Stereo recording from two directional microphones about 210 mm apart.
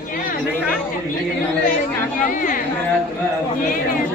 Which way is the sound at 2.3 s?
40° left (ahead or behind).